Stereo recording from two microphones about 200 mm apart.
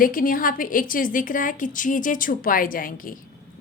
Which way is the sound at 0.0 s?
45° left (ahead or behind).